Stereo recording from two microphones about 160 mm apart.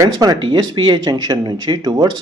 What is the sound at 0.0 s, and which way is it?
Speech, 25° right (ahead or behind).